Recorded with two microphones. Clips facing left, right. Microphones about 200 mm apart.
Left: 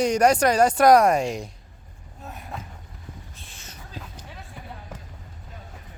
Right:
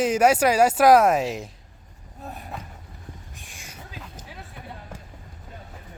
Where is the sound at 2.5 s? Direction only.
Centre (ahead or behind).